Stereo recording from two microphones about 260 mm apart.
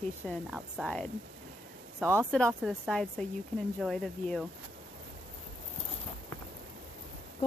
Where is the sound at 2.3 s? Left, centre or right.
Centre.